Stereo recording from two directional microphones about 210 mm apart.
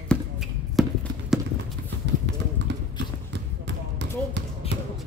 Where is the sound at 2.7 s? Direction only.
55° right (ahead or behind).